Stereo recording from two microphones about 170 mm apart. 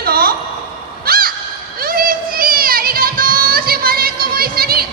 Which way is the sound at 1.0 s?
60° right (ahead or behind).